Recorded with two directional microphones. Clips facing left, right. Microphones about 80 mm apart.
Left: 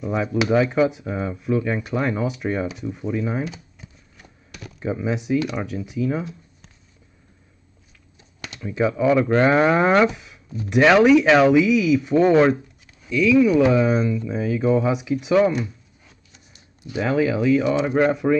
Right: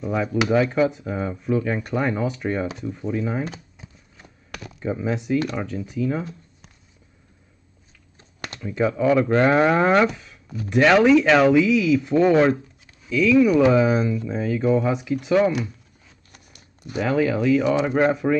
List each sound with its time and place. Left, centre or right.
0.0 s speech: centre
5.0 s speech: centre
8.2 s typing: right
8.5 s speech: centre
10.1 s a sound: centre
10.8 s speech: centre
13.1 s speech: centre
16.3 s a sound: right
17.0 s speech: centre